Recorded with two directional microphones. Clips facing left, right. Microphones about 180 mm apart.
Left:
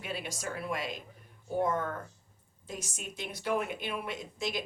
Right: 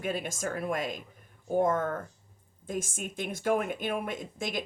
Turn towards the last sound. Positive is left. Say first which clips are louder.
# right 1 dB
turn(degrees=-50)  # may be behind; listen again after turning